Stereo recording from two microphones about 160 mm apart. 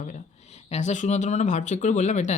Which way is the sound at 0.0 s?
45° left (ahead or behind).